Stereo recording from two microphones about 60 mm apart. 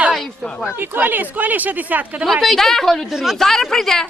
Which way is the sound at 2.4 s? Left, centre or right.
Centre.